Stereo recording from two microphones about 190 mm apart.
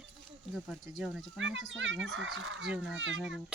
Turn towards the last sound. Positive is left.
turn(degrees=-85)